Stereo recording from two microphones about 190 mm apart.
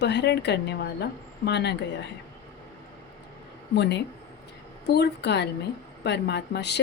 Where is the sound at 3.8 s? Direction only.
65° left (ahead or behind).